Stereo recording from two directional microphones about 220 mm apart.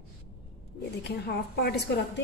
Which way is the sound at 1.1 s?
45° left (ahead or behind).